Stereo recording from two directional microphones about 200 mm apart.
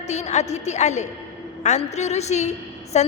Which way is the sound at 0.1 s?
35° left (ahead or behind).